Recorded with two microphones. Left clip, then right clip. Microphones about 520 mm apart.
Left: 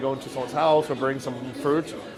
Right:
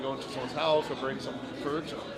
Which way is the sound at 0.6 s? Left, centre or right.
Left.